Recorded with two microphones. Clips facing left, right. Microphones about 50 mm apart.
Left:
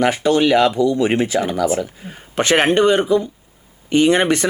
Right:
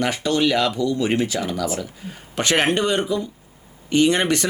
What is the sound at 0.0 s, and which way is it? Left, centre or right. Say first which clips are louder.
Speech: left 5 dB; left.